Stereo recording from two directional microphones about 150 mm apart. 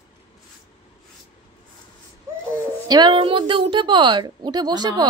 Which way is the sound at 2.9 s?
30° right (ahead or behind).